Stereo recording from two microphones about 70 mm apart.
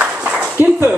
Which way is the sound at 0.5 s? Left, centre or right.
Right.